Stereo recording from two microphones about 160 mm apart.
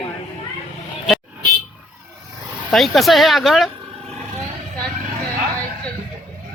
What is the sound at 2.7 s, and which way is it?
Speech, centre (ahead or behind).